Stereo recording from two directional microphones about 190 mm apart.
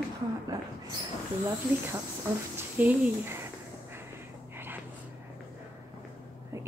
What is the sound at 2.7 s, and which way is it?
Speech, 10° right (ahead or behind).